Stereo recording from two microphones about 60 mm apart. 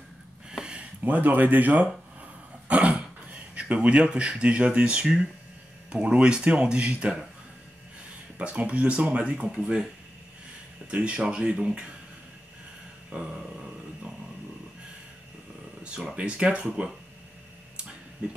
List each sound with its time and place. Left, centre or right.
0.5 s a sound: centre
1.0 s speech: right
8.4 s speech: centre
10.9 s speech: right
13.1 s speech: centre
16.2 s speech: centre